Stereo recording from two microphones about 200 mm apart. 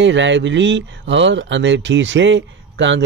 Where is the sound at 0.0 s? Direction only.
65° right (ahead or behind).